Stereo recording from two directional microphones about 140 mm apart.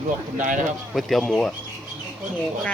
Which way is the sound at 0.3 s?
65° right (ahead or behind).